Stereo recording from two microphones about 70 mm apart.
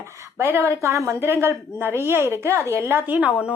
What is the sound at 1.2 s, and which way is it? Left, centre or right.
Speech, right.